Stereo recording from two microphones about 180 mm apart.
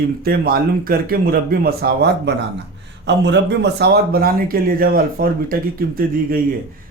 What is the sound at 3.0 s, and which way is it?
A man's voice, 75° right (ahead or behind).